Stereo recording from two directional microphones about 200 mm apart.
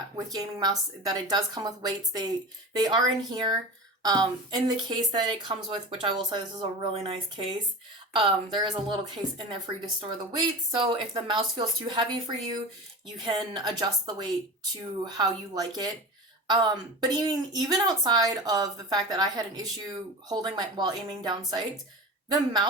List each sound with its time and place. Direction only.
0.3 s a woman's voice: 20° right (ahead or behind)
10.0 s a woman's voice: 25° right (ahead or behind)